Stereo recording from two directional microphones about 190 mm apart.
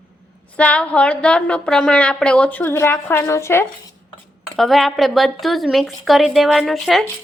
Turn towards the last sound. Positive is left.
turn(degrees=0)  # may be behind; listen again after turning